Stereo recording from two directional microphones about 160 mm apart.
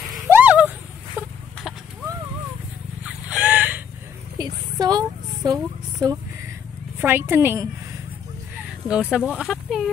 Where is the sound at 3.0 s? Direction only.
10° right (ahead or behind).